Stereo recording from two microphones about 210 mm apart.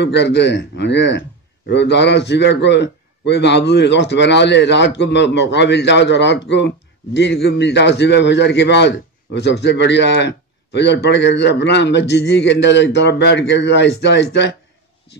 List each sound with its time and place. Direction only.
0.0 s a man's voice: 55° left (ahead or behind)